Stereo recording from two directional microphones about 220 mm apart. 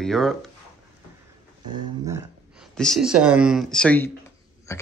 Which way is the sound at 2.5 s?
Centre (ahead or behind).